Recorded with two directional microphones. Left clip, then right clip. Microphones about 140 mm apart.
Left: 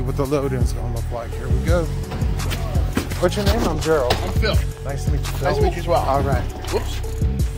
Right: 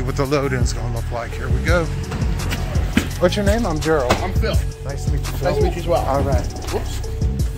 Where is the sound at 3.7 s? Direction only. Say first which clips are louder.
Left 1 dB; centre (ahead or behind).